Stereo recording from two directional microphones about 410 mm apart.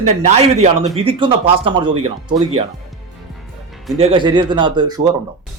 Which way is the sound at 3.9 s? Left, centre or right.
Centre.